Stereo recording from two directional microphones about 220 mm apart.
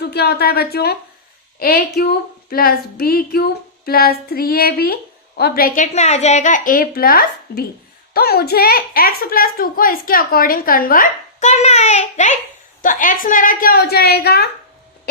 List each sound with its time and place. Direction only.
0.0 s a woman's voice: 45° left (ahead or behind)